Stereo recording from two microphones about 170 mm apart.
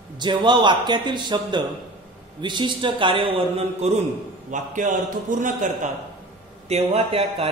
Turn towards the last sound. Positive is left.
turn(degrees=-35)  # may be behind; listen again after turning